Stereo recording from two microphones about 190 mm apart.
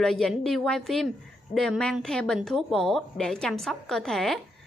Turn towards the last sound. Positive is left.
turn(degrees=0)  # may be behind; listen again after turning